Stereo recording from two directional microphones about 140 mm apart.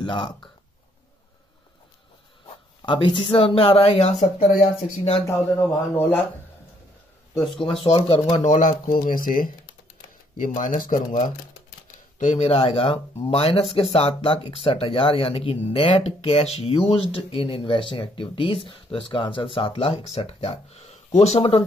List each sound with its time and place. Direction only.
0.0 s speech: 35° left (ahead or behind)
2.8 s speech: 35° left (ahead or behind); by 5.2 s 50° left (ahead or behind)
5.6 s speech: 15° left (ahead or behind)
7.3 s speech: centre (ahead or behind)
7.6 s speech: 40° left (ahead or behind); by 11.0 s 70° left (ahead or behind)
12.2 s speech: 55° left (ahead or behind)